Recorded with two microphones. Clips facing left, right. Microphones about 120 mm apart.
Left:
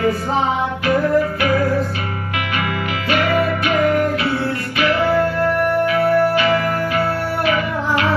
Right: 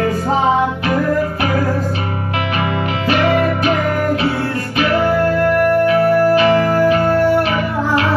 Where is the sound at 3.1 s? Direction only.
30° right (ahead or behind).